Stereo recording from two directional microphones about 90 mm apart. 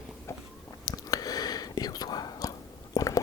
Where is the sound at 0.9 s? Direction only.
45° left (ahead or behind).